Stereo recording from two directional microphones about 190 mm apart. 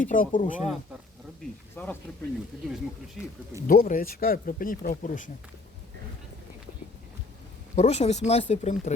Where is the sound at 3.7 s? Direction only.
45° left (ahead or behind).